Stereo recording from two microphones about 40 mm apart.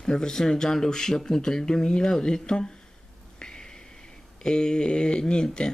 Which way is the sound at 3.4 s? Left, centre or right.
Centre.